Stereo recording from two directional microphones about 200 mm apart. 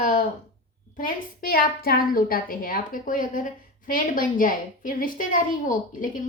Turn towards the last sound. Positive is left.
turn(degrees=40)  # may be behind; listen again after turning